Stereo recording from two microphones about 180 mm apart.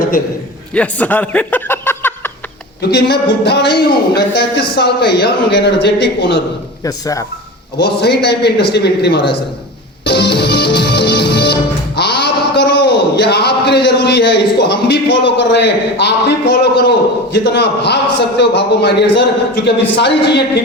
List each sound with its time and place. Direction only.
0.7 s a sound: 5° left (ahead or behind)
2.9 s a man's voice: 65° left (ahead or behind)
6.8 s speech: 20° left (ahead or behind)
7.8 s a man's voice: 65° left (ahead or behind)
10.1 s music: 70° left (ahead or behind)
11.9 s a sound: 65° left (ahead or behind)
17.3 s a man's voice: 70° left (ahead or behind)